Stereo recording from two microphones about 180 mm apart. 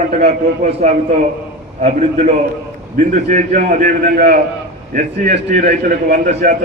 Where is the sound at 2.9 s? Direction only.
45° right (ahead or behind).